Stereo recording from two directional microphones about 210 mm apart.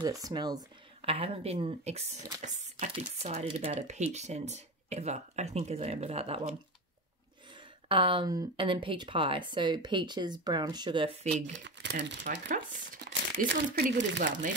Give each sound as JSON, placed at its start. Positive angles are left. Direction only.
{"t": 0.0, "sound": "speech", "side_deg": -20}
{"t": 7.9, "sound": "speech", "side_deg": -25}
{"t": 11.6, "sound": "speech", "side_deg": -55}
{"t": 12.3, "sound": "speech", "side_deg": -35}